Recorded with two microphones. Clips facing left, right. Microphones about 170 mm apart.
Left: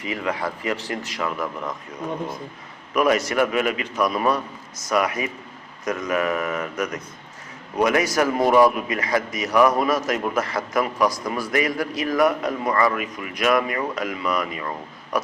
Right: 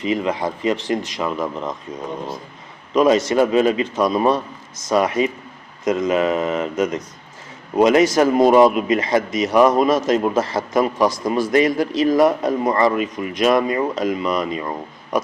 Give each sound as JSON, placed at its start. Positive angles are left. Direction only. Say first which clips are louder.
{"t": 0.0, "sound": "speech", "louder": "right 6 dB", "side_deg": -20}
{"t": 2.9, "sound": "speech", "louder": "right 5 dB", "side_deg": -25}